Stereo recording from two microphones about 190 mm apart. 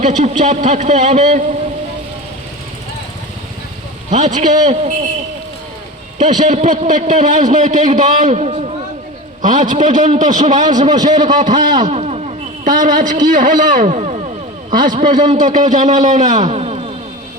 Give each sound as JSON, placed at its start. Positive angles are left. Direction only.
{"t": 0.0, "sound": "a man's voice", "side_deg": -40}
{"t": 4.1, "sound": "a man's voice", "side_deg": -40}
{"t": 6.1, "sound": "a man's voice", "side_deg": -40}
{"t": 11.8, "sound": "a sound", "side_deg": -35}
{"t": 12.8, "sound": "a man's voice", "side_deg": -45}